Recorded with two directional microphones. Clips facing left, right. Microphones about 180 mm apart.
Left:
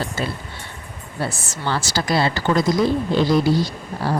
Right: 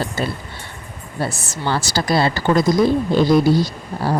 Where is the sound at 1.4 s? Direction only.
40° right (ahead or behind).